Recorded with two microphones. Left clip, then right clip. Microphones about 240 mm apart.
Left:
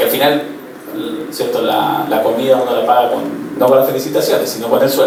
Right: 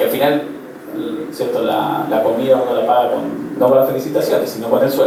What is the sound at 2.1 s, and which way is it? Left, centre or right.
A man's voice, centre.